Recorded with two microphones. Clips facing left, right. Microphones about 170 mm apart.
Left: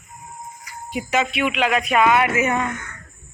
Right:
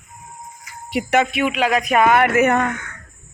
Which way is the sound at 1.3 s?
40° right (ahead or behind).